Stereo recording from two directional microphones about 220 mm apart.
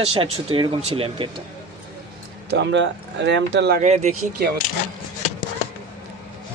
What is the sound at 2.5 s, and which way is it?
Speech, 55° right (ahead or behind).